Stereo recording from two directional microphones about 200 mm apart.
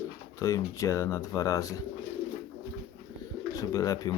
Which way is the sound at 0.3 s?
15° left (ahead or behind).